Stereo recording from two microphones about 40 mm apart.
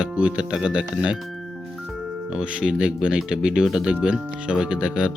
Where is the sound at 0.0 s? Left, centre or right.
Right.